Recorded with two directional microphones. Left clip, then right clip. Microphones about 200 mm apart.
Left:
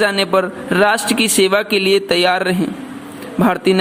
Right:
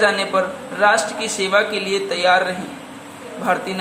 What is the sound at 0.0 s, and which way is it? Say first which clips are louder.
A man's voice: left 2 dB; 45° left (ahead or behind).